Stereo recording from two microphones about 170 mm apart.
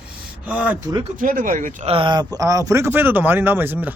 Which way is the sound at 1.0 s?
55° right (ahead or behind).